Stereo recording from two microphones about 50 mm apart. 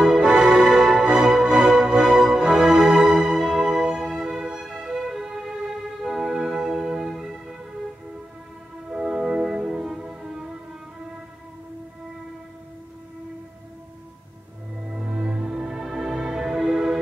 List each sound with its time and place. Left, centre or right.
0.2 s music: centre
8.9 s music: centre
14.9 s music: centre